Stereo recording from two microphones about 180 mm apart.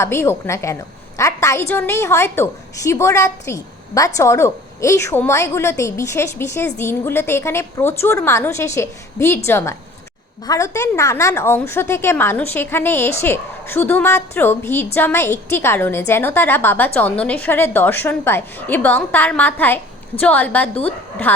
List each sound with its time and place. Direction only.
0.0 s a woman's voice: 15° left (ahead or behind)